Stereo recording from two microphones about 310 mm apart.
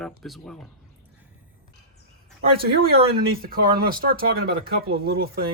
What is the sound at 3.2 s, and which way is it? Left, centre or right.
Speech, right.